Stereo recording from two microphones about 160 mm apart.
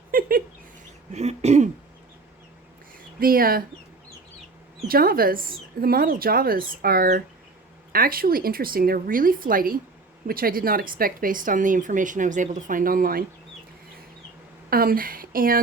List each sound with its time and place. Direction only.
0.1 s a sound: 65° right (ahead or behind)
1.1 s throat clearing: 40° right (ahead or behind)
3.2 s speech: 65° right (ahead or behind)
4.9 s speech: 65° right (ahead or behind)
14.7 s speech: 65° right (ahead or behind)